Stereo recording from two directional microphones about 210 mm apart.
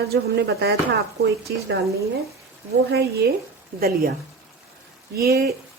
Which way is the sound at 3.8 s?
45° right (ahead or behind).